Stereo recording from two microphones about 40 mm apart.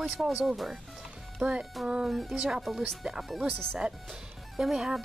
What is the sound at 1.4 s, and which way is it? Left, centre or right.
Speech, right.